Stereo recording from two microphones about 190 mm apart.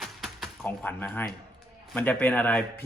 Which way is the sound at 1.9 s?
10° left (ahead or behind).